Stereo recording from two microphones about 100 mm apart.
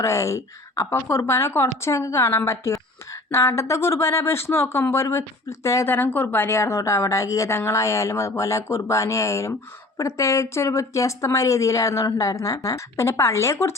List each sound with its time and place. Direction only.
0.0 s speech: 30° left (ahead or behind)